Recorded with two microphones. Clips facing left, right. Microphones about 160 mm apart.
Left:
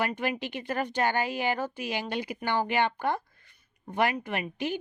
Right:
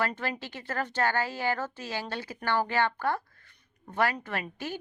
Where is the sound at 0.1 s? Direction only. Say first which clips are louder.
Left 4 dB; 15° left (ahead or behind).